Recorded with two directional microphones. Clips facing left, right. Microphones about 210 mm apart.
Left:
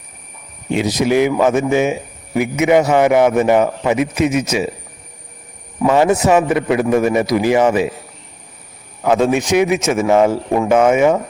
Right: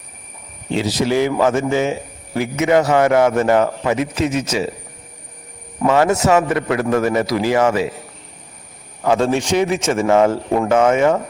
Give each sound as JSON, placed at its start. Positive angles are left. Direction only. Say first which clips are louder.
{"t": 0.7, "sound": "a man's voice", "louder": "left 2 dB", "side_deg": 15}
{"t": 5.9, "sound": "a man's voice", "louder": "left 2 dB", "side_deg": 15}
{"t": 9.0, "sound": "a man's voice", "louder": "left 2 dB", "side_deg": 10}